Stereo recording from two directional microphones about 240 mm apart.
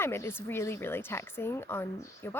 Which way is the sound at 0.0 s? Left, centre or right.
Centre.